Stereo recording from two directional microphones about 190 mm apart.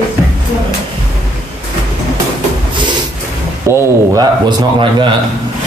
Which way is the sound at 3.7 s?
20° right (ahead or behind).